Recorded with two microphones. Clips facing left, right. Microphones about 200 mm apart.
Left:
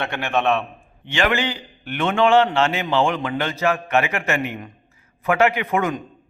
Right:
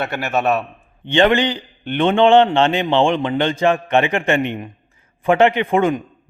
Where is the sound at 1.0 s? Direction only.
30° right (ahead or behind).